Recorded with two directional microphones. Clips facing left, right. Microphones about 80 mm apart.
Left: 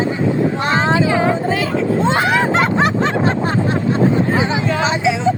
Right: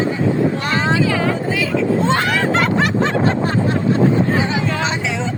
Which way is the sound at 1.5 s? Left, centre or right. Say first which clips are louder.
Left 1 dB; left.